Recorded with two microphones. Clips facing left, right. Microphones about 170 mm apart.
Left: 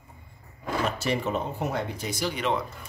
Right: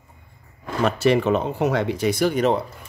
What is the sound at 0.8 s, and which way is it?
Speech, 70° right (ahead or behind).